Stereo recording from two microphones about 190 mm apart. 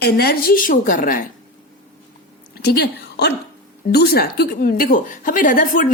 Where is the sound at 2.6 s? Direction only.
55° left (ahead or behind).